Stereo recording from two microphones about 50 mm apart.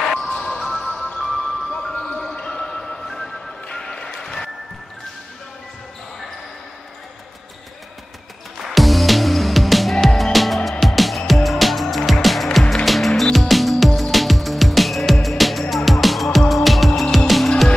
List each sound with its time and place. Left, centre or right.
0.0 s music: centre
8.6 s music: centre